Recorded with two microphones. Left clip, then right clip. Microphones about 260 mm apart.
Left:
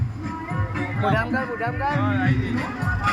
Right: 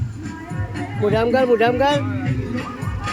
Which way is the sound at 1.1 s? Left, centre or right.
Right.